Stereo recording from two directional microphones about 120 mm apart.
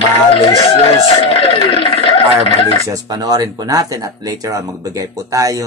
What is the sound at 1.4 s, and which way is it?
Speech, 45° left (ahead or behind).